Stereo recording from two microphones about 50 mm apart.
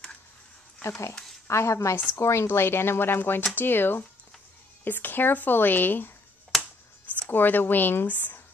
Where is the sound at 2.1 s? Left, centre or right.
Left.